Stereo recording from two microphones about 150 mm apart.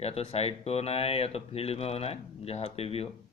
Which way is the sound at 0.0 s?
45° left (ahead or behind).